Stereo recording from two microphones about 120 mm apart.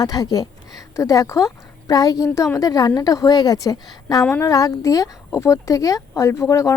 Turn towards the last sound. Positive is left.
turn(degrees=25)  # may be behind; listen again after turning